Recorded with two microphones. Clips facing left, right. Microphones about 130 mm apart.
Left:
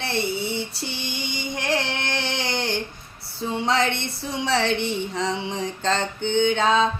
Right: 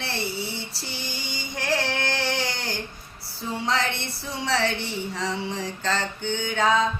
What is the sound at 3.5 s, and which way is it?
A woman's voice, 20° left (ahead or behind).